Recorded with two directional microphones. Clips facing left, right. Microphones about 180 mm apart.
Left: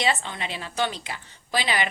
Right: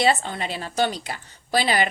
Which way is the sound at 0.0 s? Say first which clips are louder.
Right 5 dB; 40° right (ahead or behind).